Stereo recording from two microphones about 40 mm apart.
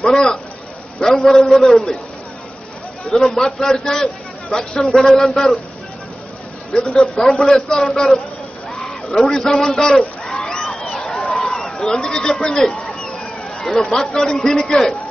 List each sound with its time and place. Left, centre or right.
0.0 s a man's voice: centre
3.1 s a man's voice: centre
6.8 s a man's voice: centre
7.8 s a man's voice: centre
10.5 s a sound: centre
13.6 s a sound: centre
14.1 s a man's voice: centre